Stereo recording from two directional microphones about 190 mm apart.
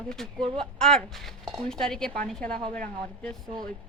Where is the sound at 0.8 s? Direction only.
5° left (ahead or behind).